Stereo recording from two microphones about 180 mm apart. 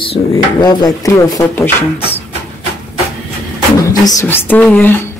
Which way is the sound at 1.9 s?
30° left (ahead or behind).